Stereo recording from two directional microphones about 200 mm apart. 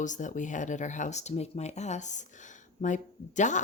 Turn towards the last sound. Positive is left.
turn(degrees=40)  # may be behind; listen again after turning